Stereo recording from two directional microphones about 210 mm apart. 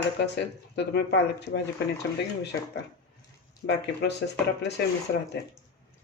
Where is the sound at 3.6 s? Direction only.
55° left (ahead or behind).